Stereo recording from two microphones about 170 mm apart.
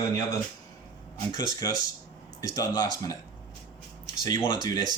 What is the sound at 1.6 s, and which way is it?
Speech, 20° left (ahead or behind).